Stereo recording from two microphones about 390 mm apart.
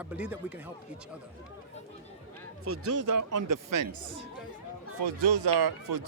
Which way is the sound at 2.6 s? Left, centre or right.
Right.